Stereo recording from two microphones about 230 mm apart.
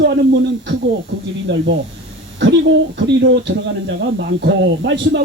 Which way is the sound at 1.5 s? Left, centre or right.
Right.